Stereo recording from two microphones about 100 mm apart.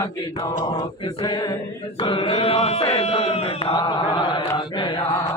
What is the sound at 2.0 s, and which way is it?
Chant, 60° left (ahead or behind).